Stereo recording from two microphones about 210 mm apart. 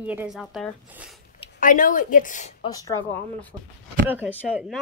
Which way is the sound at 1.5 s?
40° left (ahead or behind).